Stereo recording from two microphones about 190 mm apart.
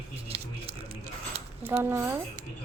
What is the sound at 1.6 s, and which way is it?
Speech, 10° right (ahead or behind).